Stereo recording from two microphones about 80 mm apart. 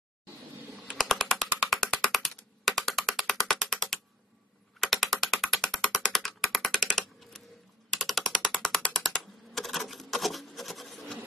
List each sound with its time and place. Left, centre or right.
0.9 s music: centre
2.1 s ratchet: centre
7.9 s mechanisms: centre
8.5 s a sound: centre